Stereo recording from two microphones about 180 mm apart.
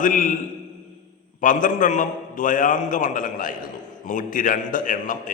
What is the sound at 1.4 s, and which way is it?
A man's voice, 45° left (ahead or behind).